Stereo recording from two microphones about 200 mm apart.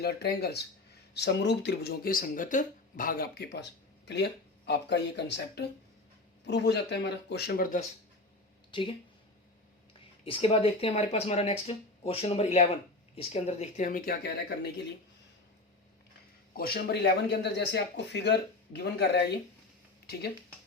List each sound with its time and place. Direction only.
0.0 s speech: 55° left (ahead or behind)
8.7 s speech: 25° left (ahead or behind)
10.2 s speech: 25° left (ahead or behind); by 14.2 s 45° left (ahead or behind)
16.6 s speech: 50° left (ahead or behind)